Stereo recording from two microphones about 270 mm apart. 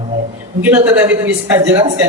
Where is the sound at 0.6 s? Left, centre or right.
Centre.